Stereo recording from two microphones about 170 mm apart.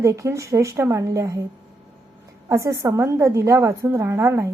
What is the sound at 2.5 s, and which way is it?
A woman's voice, 20° right (ahead or behind).